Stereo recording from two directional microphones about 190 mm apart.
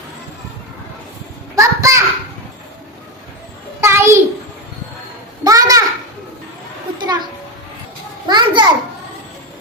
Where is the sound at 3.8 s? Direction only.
15° right (ahead or behind).